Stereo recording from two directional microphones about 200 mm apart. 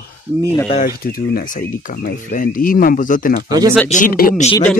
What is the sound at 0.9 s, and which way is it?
Speech, 45° left (ahead or behind).